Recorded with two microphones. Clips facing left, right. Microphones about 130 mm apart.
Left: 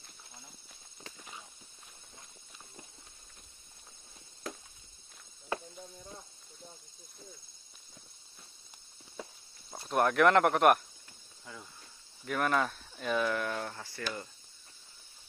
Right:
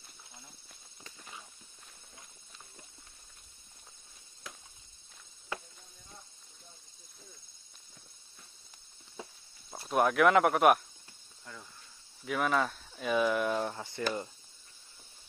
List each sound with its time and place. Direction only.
9.7 s speech: 5° right (ahead or behind)
11.5 s cricket: 5° left (ahead or behind)
12.3 s speech: centre (ahead or behind); by 14.0 s 20° right (ahead or behind)